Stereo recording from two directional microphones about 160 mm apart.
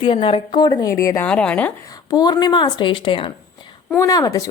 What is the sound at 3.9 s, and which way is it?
Speech, 20° left (ahead or behind).